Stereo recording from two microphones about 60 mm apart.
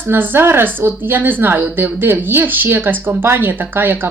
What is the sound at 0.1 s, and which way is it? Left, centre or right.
Speech, right.